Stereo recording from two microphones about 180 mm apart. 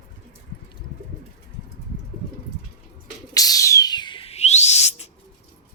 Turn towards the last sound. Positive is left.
turn(degrees=35)  # may be behind; listen again after turning